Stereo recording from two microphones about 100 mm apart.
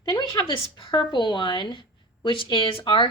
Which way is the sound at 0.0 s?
45° left (ahead or behind).